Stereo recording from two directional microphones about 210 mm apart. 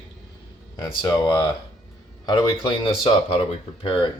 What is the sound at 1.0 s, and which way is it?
A man's voice, 20° left (ahead or behind).